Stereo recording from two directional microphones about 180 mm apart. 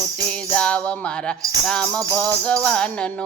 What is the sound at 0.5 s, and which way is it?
Music, 5° left (ahead or behind).